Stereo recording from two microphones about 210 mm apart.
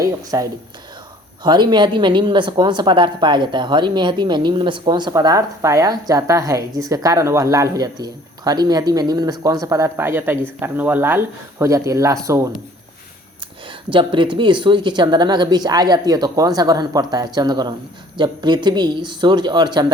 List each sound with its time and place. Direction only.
0.0 s speech: 15° right (ahead or behind)
1.5 s speech: 20° right (ahead or behind)
13.9 s speech: 25° right (ahead or behind)